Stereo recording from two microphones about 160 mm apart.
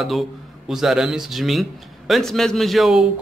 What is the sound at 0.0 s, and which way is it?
Speech, centre (ahead or behind).